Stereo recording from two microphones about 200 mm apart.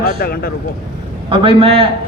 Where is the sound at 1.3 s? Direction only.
25° right (ahead or behind).